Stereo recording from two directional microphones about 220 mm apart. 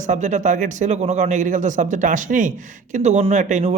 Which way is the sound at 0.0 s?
35° right (ahead or behind).